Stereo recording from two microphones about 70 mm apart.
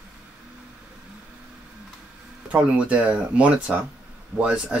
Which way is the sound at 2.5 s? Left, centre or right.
Centre.